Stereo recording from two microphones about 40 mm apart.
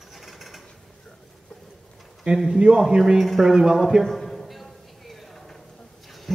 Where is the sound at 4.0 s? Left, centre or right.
Centre.